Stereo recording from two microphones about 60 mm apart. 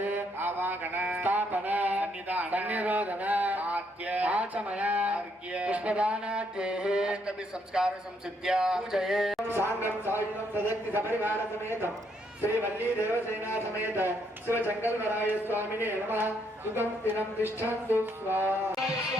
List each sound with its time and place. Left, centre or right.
0.0 s mantra: right
1.0 s music: right
8.4 s a sound: centre
9.5 s speech: right